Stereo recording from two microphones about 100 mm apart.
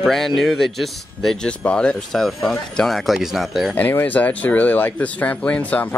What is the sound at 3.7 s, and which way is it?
Speech, 15° left (ahead or behind).